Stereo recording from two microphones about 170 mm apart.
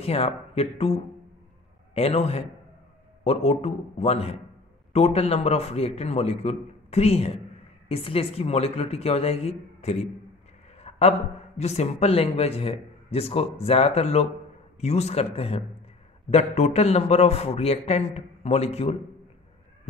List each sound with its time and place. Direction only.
0.0 s speech: 35° left (ahead or behind)